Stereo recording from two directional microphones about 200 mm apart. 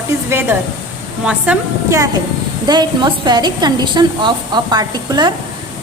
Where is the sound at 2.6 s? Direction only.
20° right (ahead or behind).